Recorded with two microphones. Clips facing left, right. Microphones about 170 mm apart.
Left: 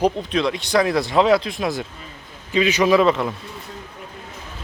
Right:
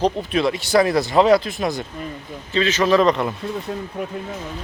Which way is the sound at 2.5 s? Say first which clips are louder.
Left 1 dB; 15° left (ahead or behind).